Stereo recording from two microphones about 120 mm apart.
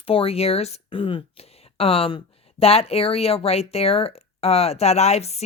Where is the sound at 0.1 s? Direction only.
55° left (ahead or behind).